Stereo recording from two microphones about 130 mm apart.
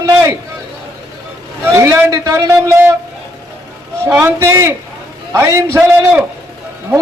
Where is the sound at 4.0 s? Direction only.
20° right (ahead or behind).